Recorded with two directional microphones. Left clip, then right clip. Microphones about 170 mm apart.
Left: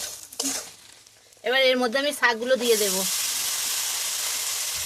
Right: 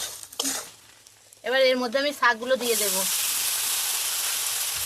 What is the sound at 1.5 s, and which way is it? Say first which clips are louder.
Speech: left 1 dB; 55° left (ahead or behind).